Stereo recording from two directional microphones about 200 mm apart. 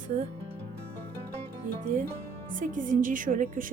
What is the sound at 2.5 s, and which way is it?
A woman's voice, 40° right (ahead or behind).